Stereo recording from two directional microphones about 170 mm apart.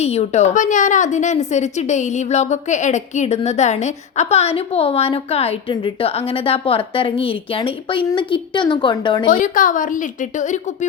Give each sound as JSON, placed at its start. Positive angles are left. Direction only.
{"t": 0.0, "sound": "a woman's voice", "side_deg": 40}
{"t": 9.3, "sound": "a woman's voice", "side_deg": 50}